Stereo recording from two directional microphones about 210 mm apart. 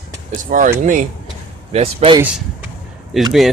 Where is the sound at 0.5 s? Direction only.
40° right (ahead or behind).